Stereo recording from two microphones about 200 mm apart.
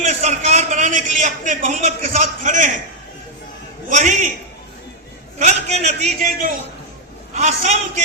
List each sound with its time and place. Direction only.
0.0 s a man's voice: 35° right (ahead or behind)
3.8 s a man's voice: 40° right (ahead or behind)
5.4 s a man's voice: 35° right (ahead or behind)